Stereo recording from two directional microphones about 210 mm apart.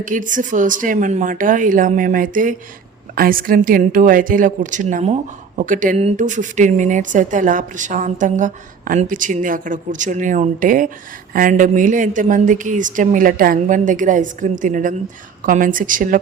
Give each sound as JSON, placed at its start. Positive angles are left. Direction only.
{"t": 0.0, "sound": "speech", "side_deg": -40}